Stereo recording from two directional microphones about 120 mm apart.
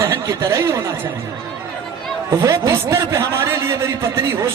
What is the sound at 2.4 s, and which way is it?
A man's voice, 25° right (ahead or behind).